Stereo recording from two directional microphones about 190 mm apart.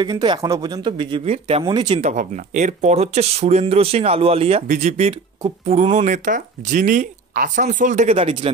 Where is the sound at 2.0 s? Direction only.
40° right (ahead or behind).